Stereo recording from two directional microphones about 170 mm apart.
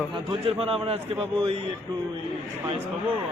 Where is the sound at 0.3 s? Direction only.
35° right (ahead or behind).